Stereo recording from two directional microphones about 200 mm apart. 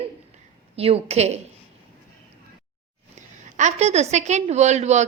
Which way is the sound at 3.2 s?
35° right (ahead or behind).